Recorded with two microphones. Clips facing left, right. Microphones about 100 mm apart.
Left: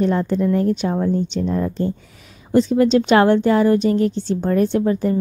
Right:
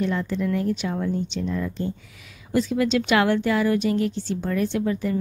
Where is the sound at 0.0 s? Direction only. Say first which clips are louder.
Left 6 dB; 40° left (ahead or behind).